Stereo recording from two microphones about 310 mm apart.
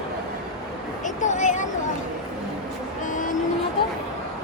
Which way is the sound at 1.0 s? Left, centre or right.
Left.